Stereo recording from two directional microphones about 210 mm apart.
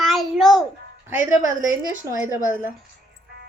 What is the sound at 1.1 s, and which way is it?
A woman's voice, 10° right (ahead or behind).